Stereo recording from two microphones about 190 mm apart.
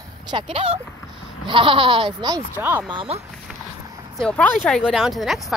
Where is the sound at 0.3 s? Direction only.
30° right (ahead or behind).